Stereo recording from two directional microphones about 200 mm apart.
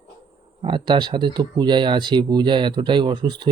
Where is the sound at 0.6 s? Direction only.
25° right (ahead or behind).